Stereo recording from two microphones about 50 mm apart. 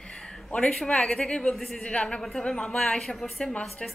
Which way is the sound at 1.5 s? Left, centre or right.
Centre.